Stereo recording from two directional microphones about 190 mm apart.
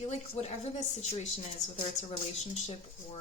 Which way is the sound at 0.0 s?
35° left (ahead or behind).